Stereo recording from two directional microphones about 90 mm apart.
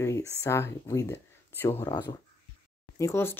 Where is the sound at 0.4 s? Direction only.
30° left (ahead or behind).